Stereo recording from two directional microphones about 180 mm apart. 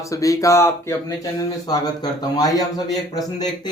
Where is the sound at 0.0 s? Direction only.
20° left (ahead or behind).